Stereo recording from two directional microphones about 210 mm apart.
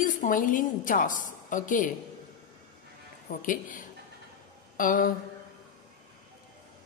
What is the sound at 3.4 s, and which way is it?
A woman's voice, 40° left (ahead or behind).